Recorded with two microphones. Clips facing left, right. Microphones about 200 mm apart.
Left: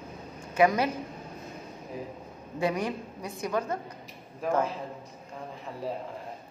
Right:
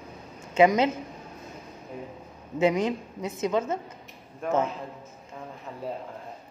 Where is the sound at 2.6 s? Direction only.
20° right (ahead or behind).